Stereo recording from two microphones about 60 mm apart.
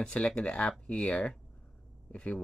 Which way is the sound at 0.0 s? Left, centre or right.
Centre.